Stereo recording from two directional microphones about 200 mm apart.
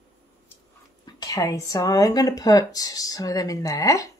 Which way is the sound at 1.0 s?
20° left (ahead or behind).